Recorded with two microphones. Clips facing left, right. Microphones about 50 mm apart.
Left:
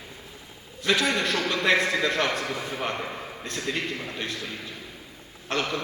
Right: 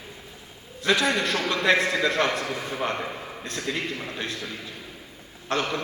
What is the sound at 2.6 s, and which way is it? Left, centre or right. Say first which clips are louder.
Speech: right 1 dB; centre.